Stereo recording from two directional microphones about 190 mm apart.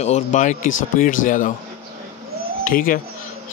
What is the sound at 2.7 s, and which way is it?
Speech, 45° left (ahead or behind).